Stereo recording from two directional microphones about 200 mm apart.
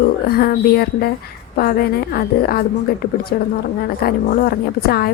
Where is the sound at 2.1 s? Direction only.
50° left (ahead or behind).